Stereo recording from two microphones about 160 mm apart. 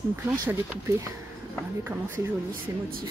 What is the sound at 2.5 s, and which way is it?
Speech, 65° right (ahead or behind).